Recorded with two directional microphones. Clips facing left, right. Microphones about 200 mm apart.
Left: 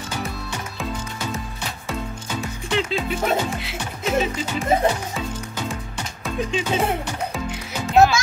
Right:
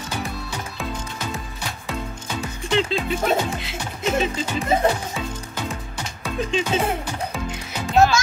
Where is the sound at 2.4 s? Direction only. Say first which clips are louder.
Right 2 dB; centre (ahead or behind).